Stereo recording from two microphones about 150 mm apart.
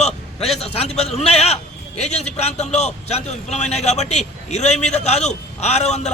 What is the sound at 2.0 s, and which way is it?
A man's voice, 50° left (ahead or behind).